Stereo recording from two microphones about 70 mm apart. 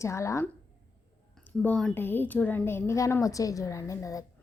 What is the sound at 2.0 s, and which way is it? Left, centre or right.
A woman's voice, left.